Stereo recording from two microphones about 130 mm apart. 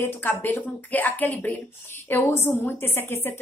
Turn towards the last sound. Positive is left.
turn(degrees=20)  # may be behind; listen again after turning